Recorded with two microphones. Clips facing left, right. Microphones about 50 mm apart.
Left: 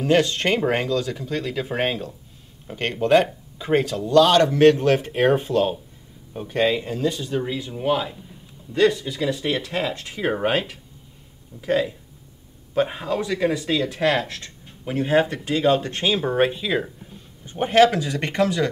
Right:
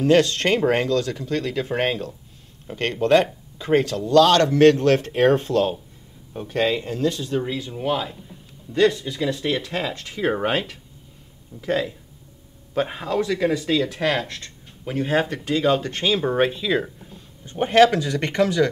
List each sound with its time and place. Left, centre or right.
0.0 s speech: centre